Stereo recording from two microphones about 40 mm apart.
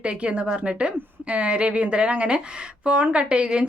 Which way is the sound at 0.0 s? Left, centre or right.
Right.